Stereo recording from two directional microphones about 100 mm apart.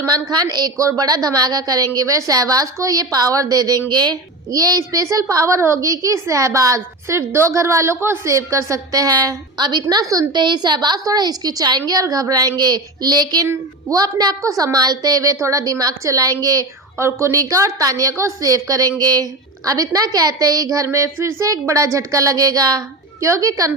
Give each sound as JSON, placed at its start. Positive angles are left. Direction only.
{"t": 0.0, "sound": "a woman's voice", "side_deg": -40}
{"t": 10.4, "sound": "a woman's voice", "side_deg": -45}